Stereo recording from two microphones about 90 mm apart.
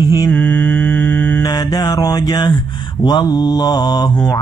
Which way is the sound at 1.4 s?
45° left (ahead or behind).